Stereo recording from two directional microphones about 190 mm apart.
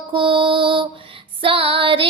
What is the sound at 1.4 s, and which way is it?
Female singing, 30° right (ahead or behind).